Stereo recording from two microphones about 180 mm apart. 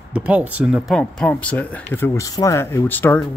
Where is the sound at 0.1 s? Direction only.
10° right (ahead or behind).